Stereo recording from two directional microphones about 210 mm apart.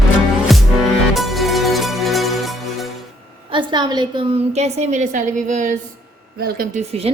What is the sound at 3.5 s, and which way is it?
A woman's voice, 20° right (ahead or behind).